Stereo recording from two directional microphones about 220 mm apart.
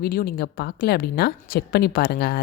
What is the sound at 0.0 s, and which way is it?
A woman's voice, 40° left (ahead or behind).